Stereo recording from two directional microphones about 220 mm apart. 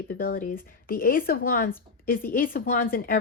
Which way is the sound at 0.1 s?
40° left (ahead or behind).